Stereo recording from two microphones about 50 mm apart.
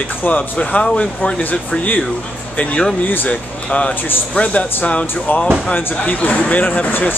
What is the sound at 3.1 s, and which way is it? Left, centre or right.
Speech, left.